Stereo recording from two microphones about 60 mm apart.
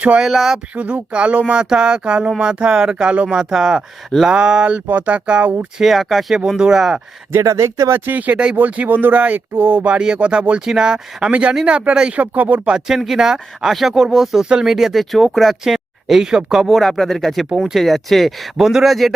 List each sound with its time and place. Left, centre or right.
0.2 s speech: centre
0.8 s speech: right
5.8 s speech: centre
7.4 s speech: right
7.9 s speech: right
10.7 s speech: centre; by 12.7 s right
13.0 s speech: centre